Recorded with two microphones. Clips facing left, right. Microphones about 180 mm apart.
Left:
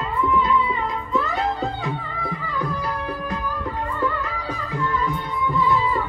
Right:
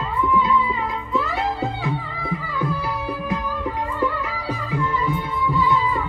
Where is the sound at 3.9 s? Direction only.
10° right (ahead or behind).